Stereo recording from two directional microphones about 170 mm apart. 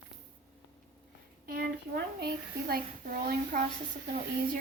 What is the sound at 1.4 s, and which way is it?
Speech, 65° right (ahead or behind).